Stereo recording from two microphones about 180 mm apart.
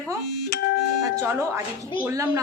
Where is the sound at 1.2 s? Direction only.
15° right (ahead or behind).